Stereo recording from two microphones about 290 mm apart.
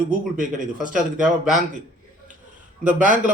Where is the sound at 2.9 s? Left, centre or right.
Right.